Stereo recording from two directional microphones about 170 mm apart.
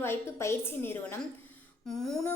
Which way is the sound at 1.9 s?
Centre (ahead or behind).